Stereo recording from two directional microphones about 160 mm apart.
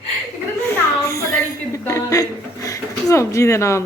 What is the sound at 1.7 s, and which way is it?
Speech, 20° left (ahead or behind).